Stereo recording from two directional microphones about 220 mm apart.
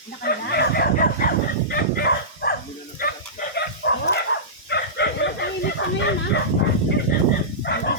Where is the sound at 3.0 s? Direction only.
40° left (ahead or behind).